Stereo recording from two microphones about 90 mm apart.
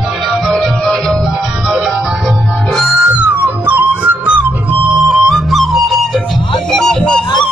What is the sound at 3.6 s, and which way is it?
Music, 15° right (ahead or behind).